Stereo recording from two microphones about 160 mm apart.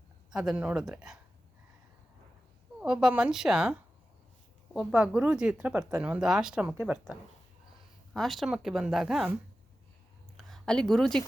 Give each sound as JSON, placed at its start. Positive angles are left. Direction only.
{"t": 0.3, "sound": "speech", "side_deg": -5}
{"t": 2.8, "sound": "a woman's voice", "side_deg": -5}
{"t": 8.1, "sound": "speech", "side_deg": 0}
{"t": 10.3, "sound": "a sound", "side_deg": 5}